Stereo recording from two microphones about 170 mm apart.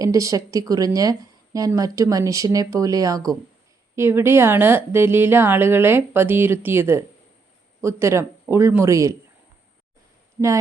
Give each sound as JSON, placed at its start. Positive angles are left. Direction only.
{"t": 0.0, "sound": "speech", "side_deg": -20}